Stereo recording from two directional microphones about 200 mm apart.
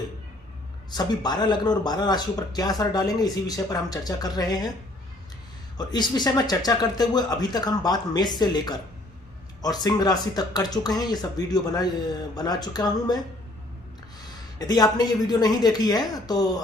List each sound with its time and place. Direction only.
0.9 s speech: 20° left (ahead or behind)
5.7 s speech: 20° left (ahead or behind)
14.6 s speech: 20° left (ahead or behind)